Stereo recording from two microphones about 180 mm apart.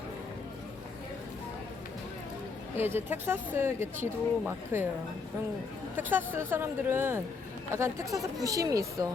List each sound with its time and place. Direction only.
2.7 s a woman's voice: 10° right (ahead or behind)
6.0 s a woman's voice: 10° right (ahead or behind)